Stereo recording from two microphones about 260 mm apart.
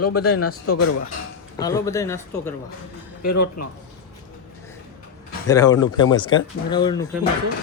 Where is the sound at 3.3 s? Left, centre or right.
Left.